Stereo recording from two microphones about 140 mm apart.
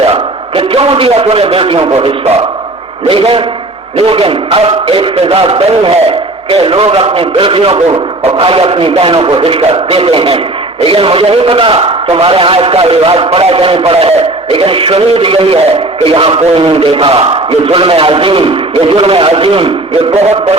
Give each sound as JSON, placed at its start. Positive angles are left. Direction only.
{"t": 0.0, "sound": "a man's voice", "side_deg": -40}